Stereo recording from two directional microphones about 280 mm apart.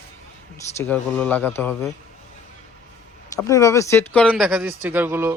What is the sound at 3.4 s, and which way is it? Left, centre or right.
Speech, centre.